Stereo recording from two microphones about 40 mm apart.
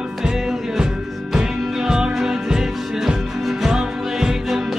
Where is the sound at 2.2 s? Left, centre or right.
Centre.